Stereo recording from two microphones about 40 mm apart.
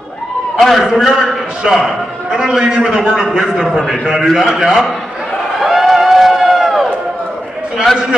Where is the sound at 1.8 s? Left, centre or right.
Centre.